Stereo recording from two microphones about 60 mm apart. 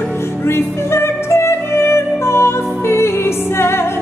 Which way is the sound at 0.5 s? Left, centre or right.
Left.